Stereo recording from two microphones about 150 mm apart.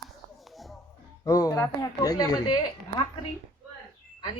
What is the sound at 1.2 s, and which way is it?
A woman's voice, 25° left (ahead or behind).